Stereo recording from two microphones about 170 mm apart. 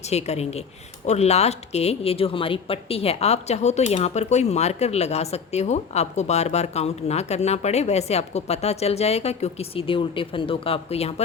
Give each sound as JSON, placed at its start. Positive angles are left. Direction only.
{"t": 0.0, "sound": "speech", "side_deg": 40}